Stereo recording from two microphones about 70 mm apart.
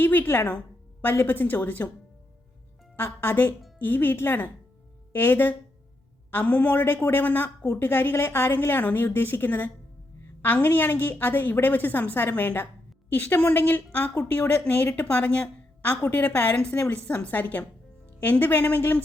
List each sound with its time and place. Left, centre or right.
0.0 s a woman's voice: left
2.9 s a woman's voice: left
16.7 s a woman's voice: left
17.1 s a woman's voice: left